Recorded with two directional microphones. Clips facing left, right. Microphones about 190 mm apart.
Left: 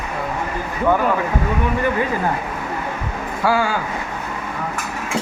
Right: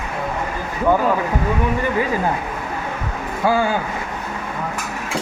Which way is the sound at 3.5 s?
20° right (ahead or behind).